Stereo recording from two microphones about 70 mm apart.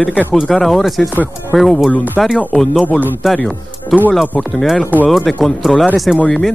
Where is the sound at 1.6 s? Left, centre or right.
Centre.